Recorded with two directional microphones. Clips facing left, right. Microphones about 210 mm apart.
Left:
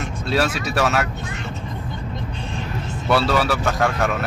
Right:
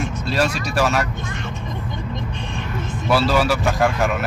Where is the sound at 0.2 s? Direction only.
Centre (ahead or behind).